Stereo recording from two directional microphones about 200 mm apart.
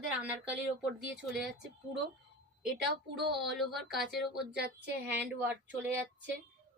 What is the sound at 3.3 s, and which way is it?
A woman's voice, centre (ahead or behind).